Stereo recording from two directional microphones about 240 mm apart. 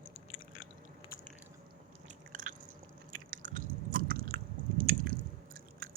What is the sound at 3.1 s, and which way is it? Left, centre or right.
Chewing, right.